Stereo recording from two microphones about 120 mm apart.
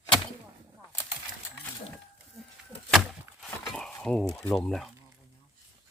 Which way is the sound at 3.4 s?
Centre (ahead or behind).